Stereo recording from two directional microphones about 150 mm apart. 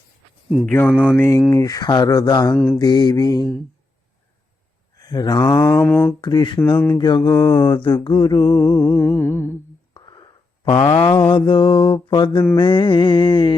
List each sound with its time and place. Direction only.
0.6 s music: 10° left (ahead or behind)
1.1 s speech: 15° left (ahead or behind)
4.9 s mantra: 25° left (ahead or behind)
5.8 s music: 10° left (ahead or behind)
6.2 s mantra: 30° left (ahead or behind)
6.7 s music: 15° left (ahead or behind)
7.2 s speech: 30° left (ahead or behind)
8.4 s music: 15° left (ahead or behind)
9.9 s a sound: 30° left (ahead or behind)
10.9 s mantra: 30° left (ahead or behind)